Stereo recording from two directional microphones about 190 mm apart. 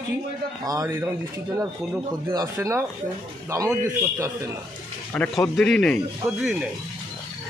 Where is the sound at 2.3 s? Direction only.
15° right (ahead or behind).